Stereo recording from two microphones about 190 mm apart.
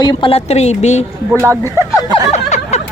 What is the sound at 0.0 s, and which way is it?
A woman's voice, 25° left (ahead or behind).